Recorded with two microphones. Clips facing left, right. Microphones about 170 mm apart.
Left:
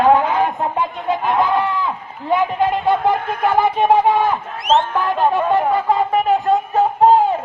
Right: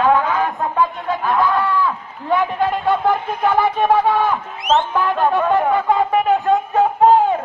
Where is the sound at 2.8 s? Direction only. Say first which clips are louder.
Left 1 dB; 20° left (ahead or behind).